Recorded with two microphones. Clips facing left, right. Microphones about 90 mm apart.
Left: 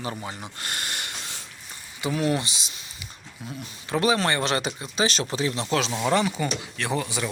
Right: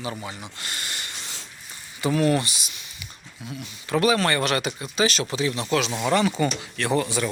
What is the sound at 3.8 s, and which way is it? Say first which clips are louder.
Speech: right 2 dB; 20° left (ahead or behind).